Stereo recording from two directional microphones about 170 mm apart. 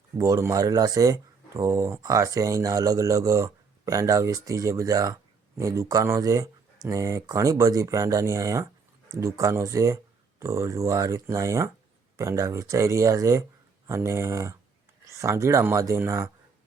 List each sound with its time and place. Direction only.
0.2 s speech: 20° right (ahead or behind)